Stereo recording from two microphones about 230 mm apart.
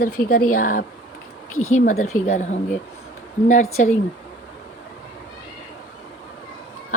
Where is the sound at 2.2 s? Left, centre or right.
Left.